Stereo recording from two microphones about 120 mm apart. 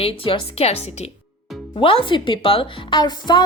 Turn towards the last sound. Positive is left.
turn(degrees=40)  # may be behind; listen again after turning